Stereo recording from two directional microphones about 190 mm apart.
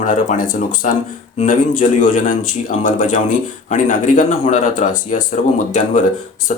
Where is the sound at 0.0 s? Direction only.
40° left (ahead or behind).